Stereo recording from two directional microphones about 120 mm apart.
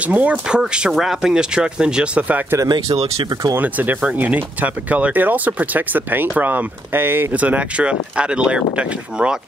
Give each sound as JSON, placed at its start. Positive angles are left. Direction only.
{"t": 0.0, "sound": "speech", "side_deg": -10}
{"t": 2.6, "sound": "speech", "side_deg": -30}
{"t": 3.5, "sound": "speech", "side_deg": -15}